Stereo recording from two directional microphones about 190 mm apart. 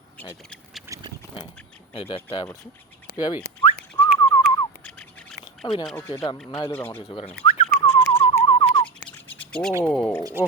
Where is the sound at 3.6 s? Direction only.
30° left (ahead or behind).